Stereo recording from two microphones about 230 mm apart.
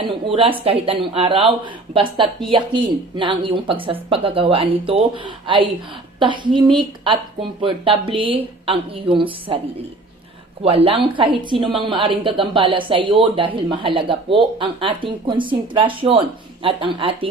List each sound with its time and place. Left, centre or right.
0.0 s speech: right
10.6 s speech: right